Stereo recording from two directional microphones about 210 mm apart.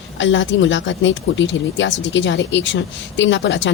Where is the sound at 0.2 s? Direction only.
60° left (ahead or behind).